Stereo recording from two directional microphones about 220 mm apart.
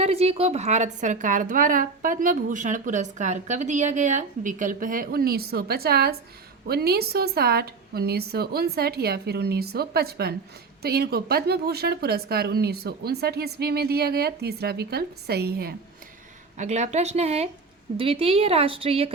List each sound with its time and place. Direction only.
0.0 s a woman's voice: 25° right (ahead or behind); by 15.7 s 45° right (ahead or behind)
16.6 s a woman's voice: 30° right (ahead or behind)